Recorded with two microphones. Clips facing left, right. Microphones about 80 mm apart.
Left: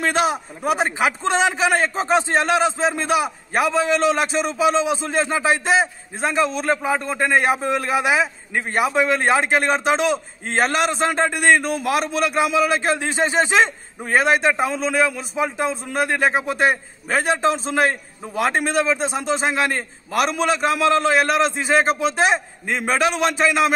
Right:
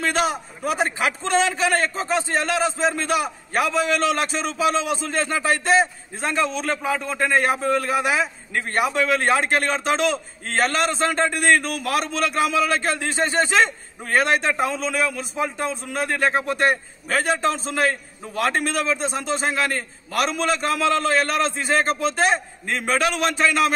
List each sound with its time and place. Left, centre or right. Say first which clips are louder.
0.0 s a man's voice: left 2 dB; centre
10.4 s a man's voice: left 1 dB; left
23.2 s a man's voice: left 2 dB; centre